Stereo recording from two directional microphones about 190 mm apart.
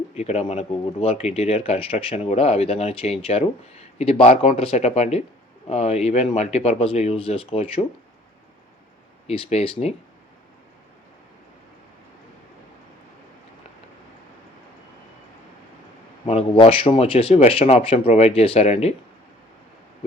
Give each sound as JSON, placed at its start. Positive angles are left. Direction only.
{"t": 0.1, "sound": "speech", "side_deg": 35}
{"t": 9.2, "sound": "speech", "side_deg": 30}
{"t": 16.2, "sound": "speech", "side_deg": 30}